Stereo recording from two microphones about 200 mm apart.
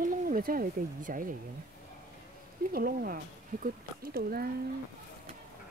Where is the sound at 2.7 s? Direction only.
45° right (ahead or behind).